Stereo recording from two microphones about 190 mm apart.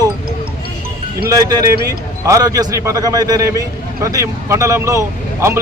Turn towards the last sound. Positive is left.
turn(degrees=-15)  # may be behind; listen again after turning